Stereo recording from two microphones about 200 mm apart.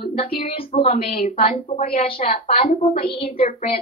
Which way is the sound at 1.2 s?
30° left (ahead or behind).